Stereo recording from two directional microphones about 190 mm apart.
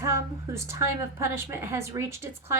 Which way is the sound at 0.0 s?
15° right (ahead or behind).